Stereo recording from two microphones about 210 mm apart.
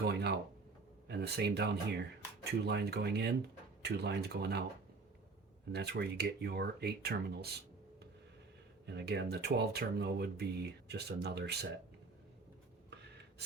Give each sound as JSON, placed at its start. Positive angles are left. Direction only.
{"t": 0.0, "sound": "speech", "side_deg": -55}
{"t": 5.7, "sound": "speech", "side_deg": -50}
{"t": 8.9, "sound": "speech", "side_deg": -55}